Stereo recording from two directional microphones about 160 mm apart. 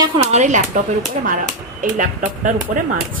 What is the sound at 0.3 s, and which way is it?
A woman's voice, 50° right (ahead or behind).